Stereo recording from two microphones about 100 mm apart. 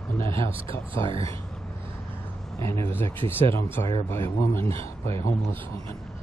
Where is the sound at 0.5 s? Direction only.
65° right (ahead or behind).